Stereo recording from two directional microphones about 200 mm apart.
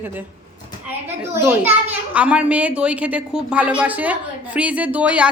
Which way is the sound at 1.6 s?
5° right (ahead or behind).